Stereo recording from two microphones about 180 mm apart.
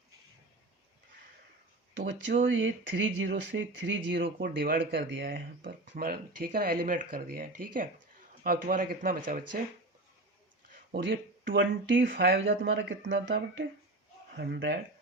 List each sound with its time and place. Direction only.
2.0 s speech: 75° right (ahead or behind)
4.2 s speech: 55° right (ahead or behind)
5.0 s speech: 90° right
6.0 s speech: 55° right (ahead or behind)
11.0 s speech: 85° right
11.9 s speech: 55° right (ahead or behind)
12.4 s speech: 90° right
14.3 s speech: 65° right (ahead or behind)